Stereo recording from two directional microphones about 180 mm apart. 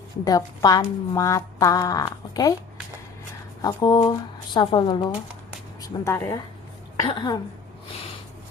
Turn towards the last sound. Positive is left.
turn(degrees=25)  # may be behind; listen again after turning